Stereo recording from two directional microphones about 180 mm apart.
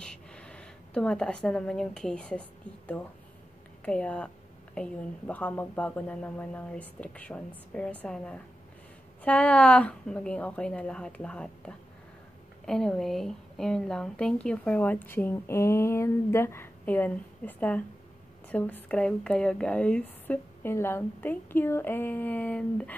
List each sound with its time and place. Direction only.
0.0 s speech: 5° left (ahead or behind)
3.8 s a woman's voice: 5° left (ahead or behind)